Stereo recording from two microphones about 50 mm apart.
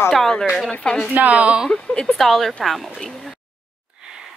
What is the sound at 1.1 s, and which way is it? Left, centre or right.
Speech, right.